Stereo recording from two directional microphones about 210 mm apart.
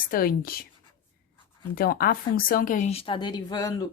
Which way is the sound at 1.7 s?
45° left (ahead or behind).